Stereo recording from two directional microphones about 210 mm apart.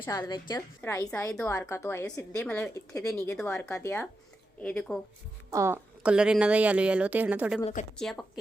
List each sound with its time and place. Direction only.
0.0 s a woman's voice: 20° left (ahead or behind)
5.5 s a woman's voice: 15° right (ahead or behind)